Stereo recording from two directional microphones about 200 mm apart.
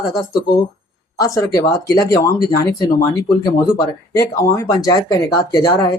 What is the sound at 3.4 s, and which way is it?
Speech, 15° left (ahead or behind).